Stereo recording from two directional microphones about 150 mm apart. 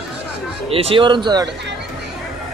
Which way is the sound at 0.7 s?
40° right (ahead or behind).